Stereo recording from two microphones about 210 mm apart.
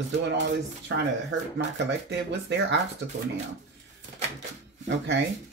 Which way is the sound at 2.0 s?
55° right (ahead or behind).